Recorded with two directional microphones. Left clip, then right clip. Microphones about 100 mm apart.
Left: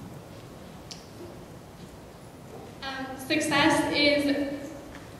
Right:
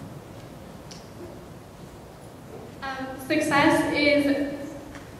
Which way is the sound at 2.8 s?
25° left (ahead or behind).